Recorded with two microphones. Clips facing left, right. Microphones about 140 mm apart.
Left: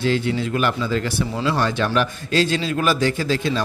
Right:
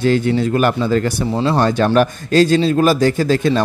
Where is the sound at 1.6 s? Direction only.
45° right (ahead or behind).